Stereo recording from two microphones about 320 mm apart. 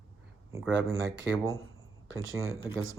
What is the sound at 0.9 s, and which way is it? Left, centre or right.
Speech, right.